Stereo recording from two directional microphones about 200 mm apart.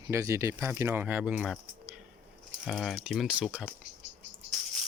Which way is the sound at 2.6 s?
Centre (ahead or behind).